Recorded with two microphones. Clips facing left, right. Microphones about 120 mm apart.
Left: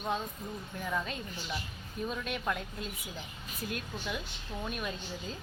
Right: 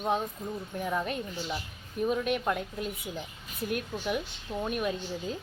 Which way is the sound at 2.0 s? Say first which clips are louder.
Right 8 dB; 55° right (ahead or behind).